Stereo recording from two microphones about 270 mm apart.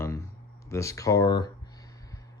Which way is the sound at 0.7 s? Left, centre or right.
Centre.